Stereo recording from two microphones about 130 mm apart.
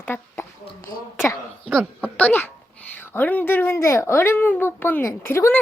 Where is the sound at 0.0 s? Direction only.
15° left (ahead or behind).